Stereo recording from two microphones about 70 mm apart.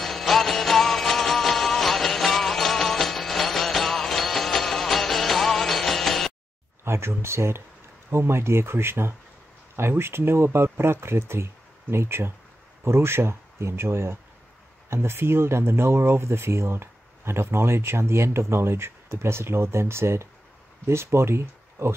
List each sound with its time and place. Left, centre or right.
0.0 s music: centre
6.8 s speech: right